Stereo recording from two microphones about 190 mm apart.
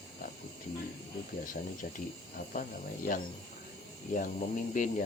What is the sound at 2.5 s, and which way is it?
Speech, 45° left (ahead or behind).